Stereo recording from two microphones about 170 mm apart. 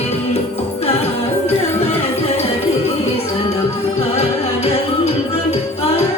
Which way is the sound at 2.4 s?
40° left (ahead or behind).